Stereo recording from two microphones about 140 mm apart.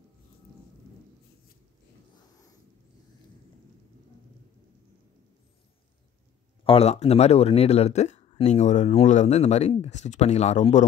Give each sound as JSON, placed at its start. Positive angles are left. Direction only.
{"t": 6.6, "sound": "speech", "side_deg": 45}